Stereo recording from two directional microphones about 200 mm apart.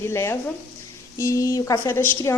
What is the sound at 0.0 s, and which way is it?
A woman's voice, 15° left (ahead or behind).